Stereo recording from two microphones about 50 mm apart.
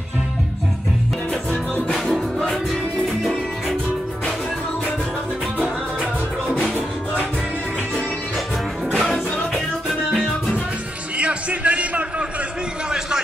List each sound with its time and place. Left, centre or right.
1.3 s music: centre
2.5 s music: centre
8.9 s music: centre
11.1 s a sound: right